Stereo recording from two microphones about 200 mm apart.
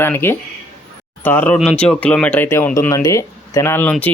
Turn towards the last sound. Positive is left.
turn(degrees=10)  # may be behind; listen again after turning